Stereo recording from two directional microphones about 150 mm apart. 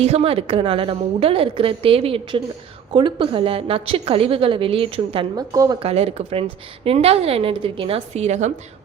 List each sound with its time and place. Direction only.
0.0 s a woman's voice: 45° right (ahead or behind)
5.4 s a woman's voice: 25° right (ahead or behind)
5.8 s a woman's voice: 40° right (ahead or behind)